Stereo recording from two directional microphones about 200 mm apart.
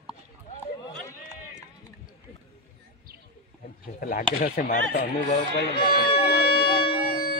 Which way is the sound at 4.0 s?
45° left (ahead or behind).